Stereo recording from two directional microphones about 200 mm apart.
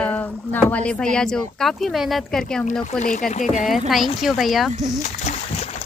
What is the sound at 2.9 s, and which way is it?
Speech, 40° left (ahead or behind).